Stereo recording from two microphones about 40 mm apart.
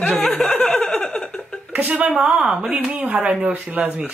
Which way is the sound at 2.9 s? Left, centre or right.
Right.